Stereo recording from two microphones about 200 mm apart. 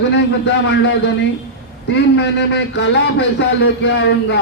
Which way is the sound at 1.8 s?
60° left (ahead or behind).